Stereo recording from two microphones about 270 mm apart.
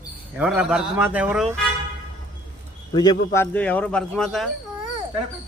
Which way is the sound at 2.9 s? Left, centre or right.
Centre.